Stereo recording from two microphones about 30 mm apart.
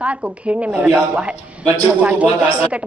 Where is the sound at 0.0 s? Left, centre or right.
Right.